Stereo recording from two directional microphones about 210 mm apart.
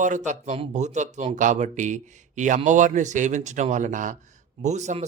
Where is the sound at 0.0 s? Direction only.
35° right (ahead or behind).